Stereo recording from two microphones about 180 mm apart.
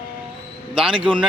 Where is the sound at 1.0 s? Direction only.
30° right (ahead or behind).